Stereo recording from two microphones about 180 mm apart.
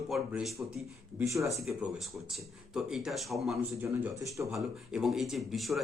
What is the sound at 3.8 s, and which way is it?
Speech, 15° right (ahead or behind).